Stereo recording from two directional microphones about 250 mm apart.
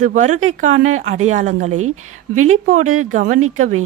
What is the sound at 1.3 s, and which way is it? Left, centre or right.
Speech, right.